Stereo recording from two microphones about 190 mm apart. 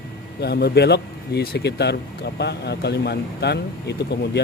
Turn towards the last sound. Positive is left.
turn(degrees=60)  # may be behind; listen again after turning